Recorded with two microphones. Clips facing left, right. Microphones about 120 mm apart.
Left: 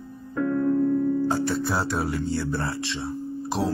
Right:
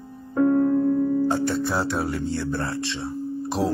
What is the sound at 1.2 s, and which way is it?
Speech, centre (ahead or behind).